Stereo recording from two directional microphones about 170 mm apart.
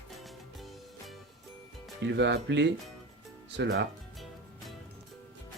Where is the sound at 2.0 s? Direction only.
90° right.